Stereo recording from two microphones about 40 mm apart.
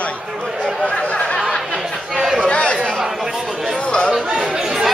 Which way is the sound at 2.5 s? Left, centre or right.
Left.